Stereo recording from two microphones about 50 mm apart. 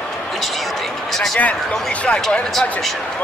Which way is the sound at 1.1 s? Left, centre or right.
Centre.